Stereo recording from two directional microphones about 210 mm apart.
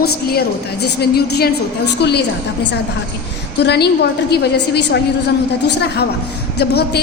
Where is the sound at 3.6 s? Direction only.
55° left (ahead or behind).